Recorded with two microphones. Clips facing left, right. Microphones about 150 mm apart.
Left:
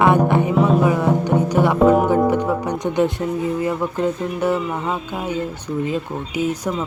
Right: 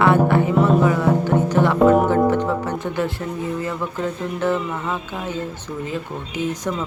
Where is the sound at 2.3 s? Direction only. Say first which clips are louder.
Left 1 dB; 15° left (ahead or behind).